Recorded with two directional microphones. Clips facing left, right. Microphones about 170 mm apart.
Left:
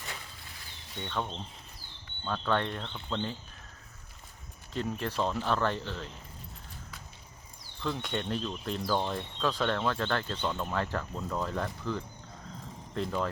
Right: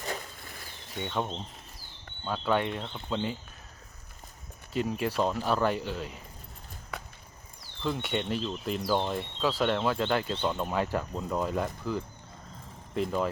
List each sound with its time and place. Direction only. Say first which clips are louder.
1.0 s speech: right 3 dB; 15° right (ahead or behind)
4.7 s speech: right 4 dB; 10° right (ahead or behind)
6.9 s a sound: right 14 dB; 60° right (ahead or behind)
7.9 s speech: right 3 dB; 5° right (ahead or behind)